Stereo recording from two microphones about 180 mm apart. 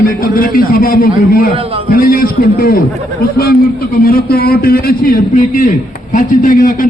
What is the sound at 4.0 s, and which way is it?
A man's voice, 55° left (ahead or behind).